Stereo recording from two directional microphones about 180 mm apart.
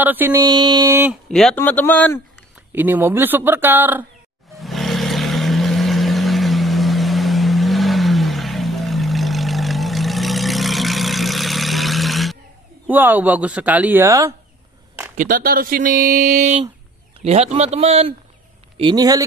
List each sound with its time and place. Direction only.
0.0 s speech: 10° right (ahead or behind)
1.3 s a man's voice: 5° left (ahead or behind)
2.7 s speech: 10° right (ahead or behind)
4.6 s vehicle: centre (ahead or behind)
12.8 s speech: 10° right (ahead or behind)
15.1 s speech: 55° right (ahead or behind)
17.2 s a man's voice: 35° right (ahead or behind)
18.8 s speech: 25° right (ahead or behind)